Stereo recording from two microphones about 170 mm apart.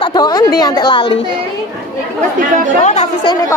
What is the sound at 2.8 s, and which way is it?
Speech, 45° left (ahead or behind).